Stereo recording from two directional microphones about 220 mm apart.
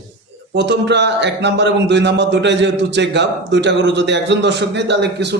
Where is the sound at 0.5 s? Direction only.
50° right (ahead or behind).